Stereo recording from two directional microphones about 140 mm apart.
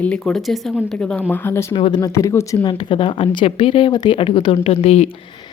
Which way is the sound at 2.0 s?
20° left (ahead or behind).